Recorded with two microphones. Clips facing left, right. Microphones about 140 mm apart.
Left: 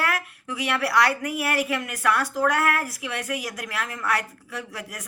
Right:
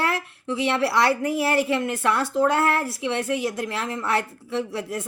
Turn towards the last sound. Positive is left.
turn(degrees=-25)  # may be behind; listen again after turning